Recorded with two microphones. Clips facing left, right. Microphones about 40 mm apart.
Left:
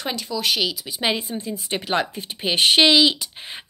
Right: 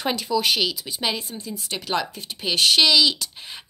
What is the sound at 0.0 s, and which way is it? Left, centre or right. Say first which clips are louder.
Speech: right 3 dB; centre.